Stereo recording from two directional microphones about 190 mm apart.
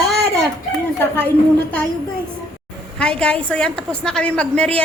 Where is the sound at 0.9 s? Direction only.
10° left (ahead or behind).